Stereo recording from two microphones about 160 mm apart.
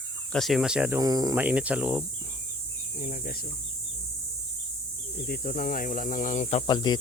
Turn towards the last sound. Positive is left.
turn(degrees=30)  # may be behind; listen again after turning